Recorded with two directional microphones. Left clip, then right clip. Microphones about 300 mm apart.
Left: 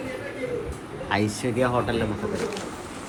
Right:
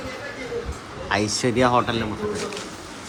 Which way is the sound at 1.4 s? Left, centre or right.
Right.